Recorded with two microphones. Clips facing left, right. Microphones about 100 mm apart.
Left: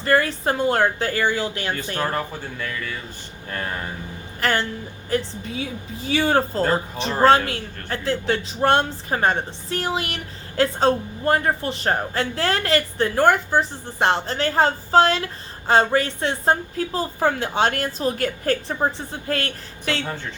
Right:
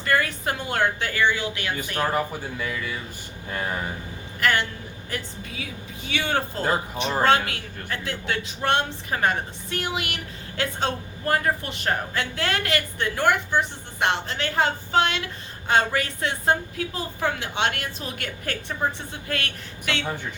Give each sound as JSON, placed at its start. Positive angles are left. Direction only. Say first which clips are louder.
{"t": 0.0, "sound": "speech", "louder": "left 4 dB", "side_deg": 30}
{"t": 2.0, "sound": "speech", "louder": "right 3 dB", "side_deg": -10}
{"t": 4.4, "sound": "a woman's voice", "louder": "left 1 dB", "side_deg": 35}
{"t": 6.6, "sound": "speech", "louder": "left 3 dB", "side_deg": -5}
{"t": 7.2, "sound": "speech", "louder": "left 5 dB", "side_deg": 35}